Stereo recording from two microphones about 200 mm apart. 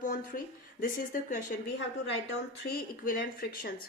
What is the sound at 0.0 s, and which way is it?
Speech, 40° left (ahead or behind).